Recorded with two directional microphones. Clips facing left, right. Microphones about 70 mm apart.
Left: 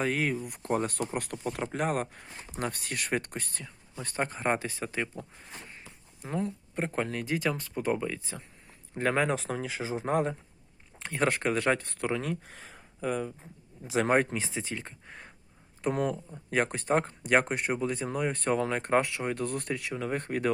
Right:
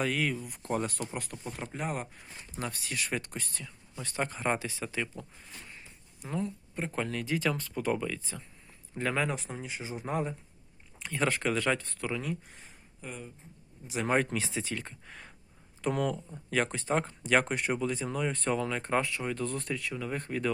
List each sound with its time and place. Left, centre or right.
0.0 s speech: left
0.4 s speech: left
9.3 s speech: left
10.1 s speech: left
11.0 s speech: left
14.3 s speech: left
15.8 s speech: left